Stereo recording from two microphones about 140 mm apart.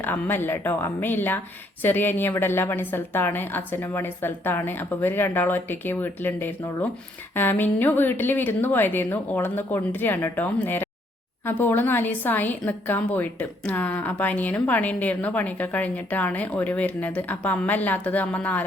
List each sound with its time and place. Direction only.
0.0 s a woman's voice: 15° left (ahead or behind)